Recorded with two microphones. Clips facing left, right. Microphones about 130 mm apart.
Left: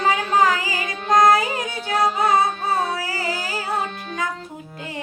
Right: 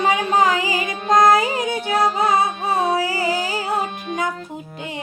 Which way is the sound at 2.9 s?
25° right (ahead or behind).